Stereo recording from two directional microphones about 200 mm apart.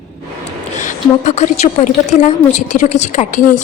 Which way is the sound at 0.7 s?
40° left (ahead or behind).